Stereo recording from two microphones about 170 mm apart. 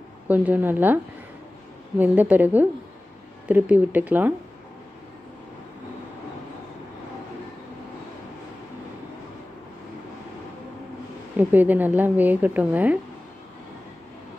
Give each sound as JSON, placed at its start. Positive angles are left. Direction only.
{"t": 0.3, "sound": "a woman's voice", "side_deg": -10}
{"t": 2.0, "sound": "a woman's voice", "side_deg": -10}
{"t": 11.3, "sound": "a woman's voice", "side_deg": -10}